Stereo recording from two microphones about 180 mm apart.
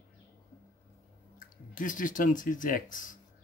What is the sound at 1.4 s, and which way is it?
Speech, 50° left (ahead or behind).